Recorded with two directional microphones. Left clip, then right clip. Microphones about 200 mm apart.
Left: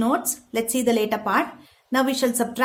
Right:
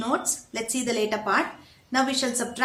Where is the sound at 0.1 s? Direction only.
50° left (ahead or behind).